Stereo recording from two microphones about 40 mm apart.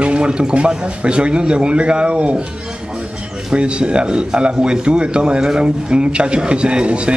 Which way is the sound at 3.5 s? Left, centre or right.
Right.